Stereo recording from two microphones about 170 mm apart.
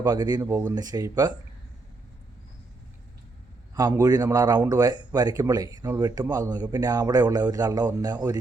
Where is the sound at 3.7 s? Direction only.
20° right (ahead or behind).